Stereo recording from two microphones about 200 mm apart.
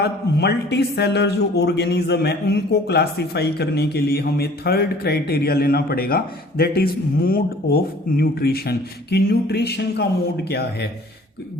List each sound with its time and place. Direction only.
0.0 s speech: 55° left (ahead or behind)